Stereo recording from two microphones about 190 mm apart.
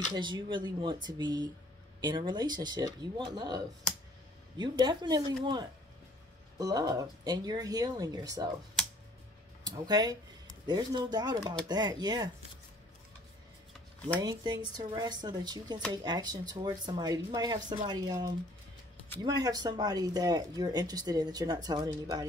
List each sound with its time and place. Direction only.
0.1 s speech: 25° right (ahead or behind)
9.7 s speech: 20° right (ahead or behind)
14.2 s speech: 20° right (ahead or behind)